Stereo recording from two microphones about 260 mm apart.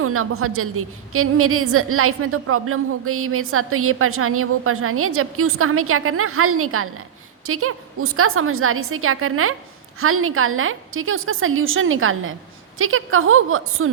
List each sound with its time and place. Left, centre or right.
0.0 s a woman's voice: right